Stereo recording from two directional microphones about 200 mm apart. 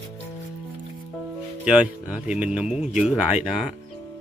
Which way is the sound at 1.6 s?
5° right (ahead or behind).